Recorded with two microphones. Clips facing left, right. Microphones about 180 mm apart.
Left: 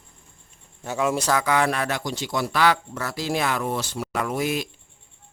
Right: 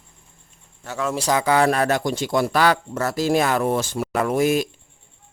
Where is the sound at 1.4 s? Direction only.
35° right (ahead or behind).